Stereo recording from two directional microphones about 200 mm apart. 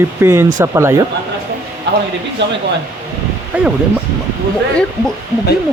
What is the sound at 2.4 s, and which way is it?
Speech, 60° right (ahead or behind).